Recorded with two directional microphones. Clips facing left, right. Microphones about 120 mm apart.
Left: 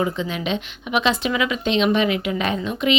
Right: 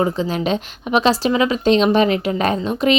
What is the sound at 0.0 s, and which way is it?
Speech, 35° right (ahead or behind).